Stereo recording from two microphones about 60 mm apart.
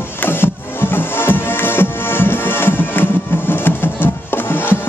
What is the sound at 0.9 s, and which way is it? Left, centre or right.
Music, left.